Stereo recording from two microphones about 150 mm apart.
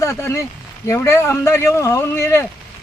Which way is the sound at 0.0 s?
20° left (ahead or behind).